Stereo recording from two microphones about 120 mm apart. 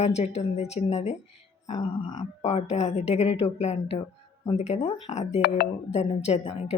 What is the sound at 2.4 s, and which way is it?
Speech, 65° left (ahead or behind).